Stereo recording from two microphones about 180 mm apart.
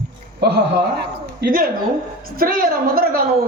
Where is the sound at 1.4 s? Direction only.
55° right (ahead or behind).